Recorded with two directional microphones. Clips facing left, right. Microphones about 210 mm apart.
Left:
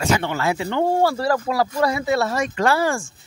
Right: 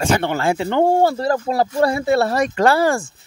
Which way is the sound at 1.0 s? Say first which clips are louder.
Right 2 dB; 25° right (ahead or behind).